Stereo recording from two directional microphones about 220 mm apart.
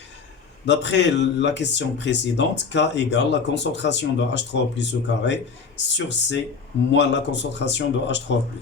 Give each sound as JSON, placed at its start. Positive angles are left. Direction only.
{"t": 0.6, "sound": "speech", "side_deg": 55}